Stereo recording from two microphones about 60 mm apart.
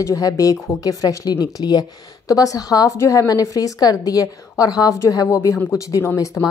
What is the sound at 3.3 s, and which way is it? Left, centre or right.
A woman's voice, left.